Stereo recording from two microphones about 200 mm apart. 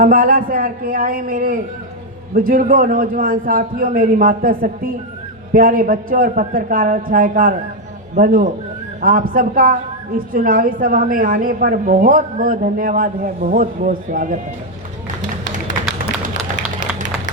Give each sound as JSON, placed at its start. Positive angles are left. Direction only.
{"t": 0.0, "sound": "a woman's voice", "side_deg": -45}